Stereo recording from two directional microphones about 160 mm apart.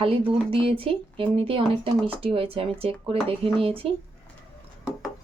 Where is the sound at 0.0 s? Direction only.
35° right (ahead or behind).